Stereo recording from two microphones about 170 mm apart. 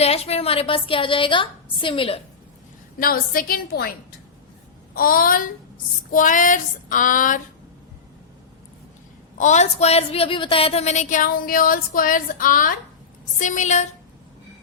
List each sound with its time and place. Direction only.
0.0 s a woman's voice: 35° left (ahead or behind)
3.0 s a woman's voice: 60° left (ahead or behind)
4.9 s a woman's voice: 55° left (ahead or behind)
9.4 s a woman's voice: 45° left (ahead or behind)